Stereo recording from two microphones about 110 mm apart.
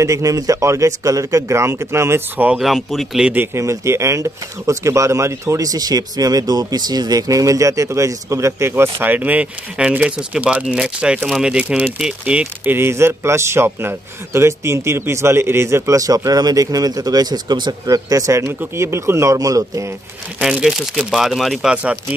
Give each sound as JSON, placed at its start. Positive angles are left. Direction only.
{"t": 0.0, "sound": "speech", "side_deg": -30}
{"t": 2.6, "sound": "speech", "side_deg": 0}
{"t": 3.3, "sound": "speech", "side_deg": -25}
{"t": 12.6, "sound": "speech", "side_deg": -20}
{"t": 17.8, "sound": "speech", "side_deg": -30}
{"t": 20.3, "sound": "speech", "side_deg": -5}